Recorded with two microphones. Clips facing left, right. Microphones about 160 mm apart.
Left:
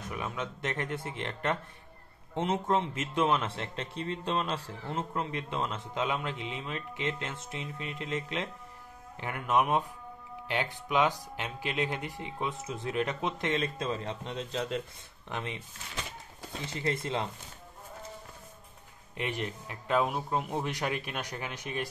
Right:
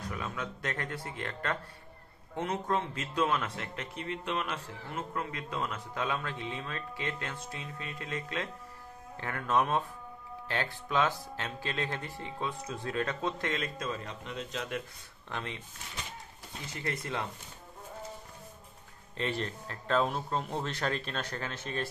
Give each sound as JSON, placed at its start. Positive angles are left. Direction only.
{"t": 0.0, "sound": "speech", "side_deg": 20}
{"t": 15.2, "sound": "speech", "side_deg": 15}
{"t": 16.8, "sound": "speech", "side_deg": 25}
{"t": 19.1, "sound": "speech", "side_deg": 15}